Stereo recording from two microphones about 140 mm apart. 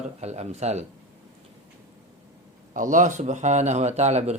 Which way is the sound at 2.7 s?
65° right (ahead or behind).